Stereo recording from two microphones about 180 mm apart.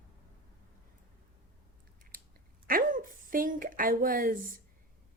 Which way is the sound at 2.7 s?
50° right (ahead or behind).